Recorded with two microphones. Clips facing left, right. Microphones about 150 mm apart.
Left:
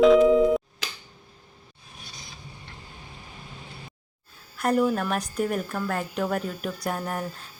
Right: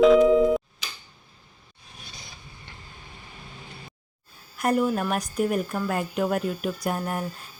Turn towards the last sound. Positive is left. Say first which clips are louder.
# right 1 dB
turn(degrees=-5)  # may be behind; listen again after turning